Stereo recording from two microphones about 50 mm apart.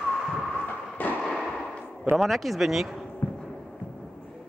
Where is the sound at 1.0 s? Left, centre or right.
Left.